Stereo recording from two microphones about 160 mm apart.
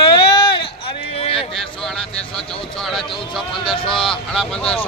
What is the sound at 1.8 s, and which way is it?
Speech, 5° left (ahead or behind).